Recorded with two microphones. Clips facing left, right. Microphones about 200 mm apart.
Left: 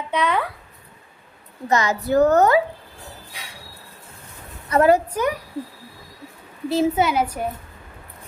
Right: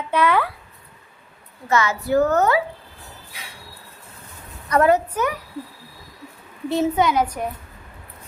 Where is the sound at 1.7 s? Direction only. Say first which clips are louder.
Even; 35° left (ahead or behind).